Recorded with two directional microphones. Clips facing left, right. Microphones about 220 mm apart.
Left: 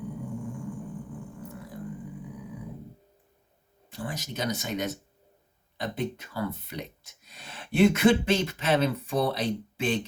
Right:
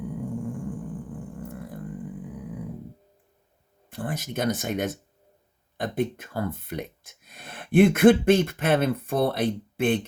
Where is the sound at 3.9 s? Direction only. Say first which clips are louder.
Right 4 dB; 55° right (ahead or behind).